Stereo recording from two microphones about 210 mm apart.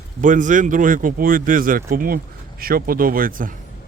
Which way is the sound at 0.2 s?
35° right (ahead or behind).